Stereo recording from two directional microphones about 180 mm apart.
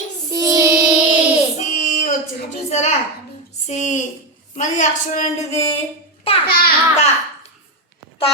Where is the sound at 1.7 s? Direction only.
45° left (ahead or behind).